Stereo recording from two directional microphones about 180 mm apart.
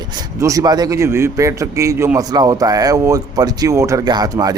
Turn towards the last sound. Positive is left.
turn(degrees=-20)  # may be behind; listen again after turning